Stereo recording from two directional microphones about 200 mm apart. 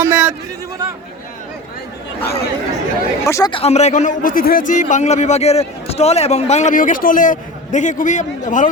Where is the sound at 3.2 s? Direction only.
15° left (ahead or behind).